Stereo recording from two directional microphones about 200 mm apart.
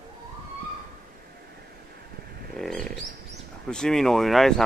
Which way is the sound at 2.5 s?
Centre (ahead or behind).